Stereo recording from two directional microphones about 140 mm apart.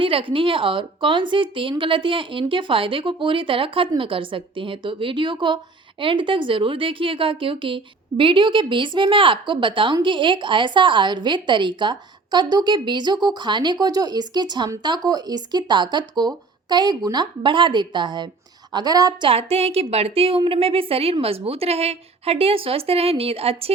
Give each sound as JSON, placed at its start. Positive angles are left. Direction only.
{"t": 0.0, "sound": "a woman's voice", "side_deg": -40}
{"t": 19.3, "sound": "a woman's voice", "side_deg": -45}